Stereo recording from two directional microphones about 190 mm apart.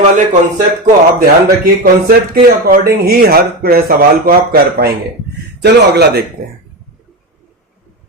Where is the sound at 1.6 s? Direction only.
50° right (ahead or behind).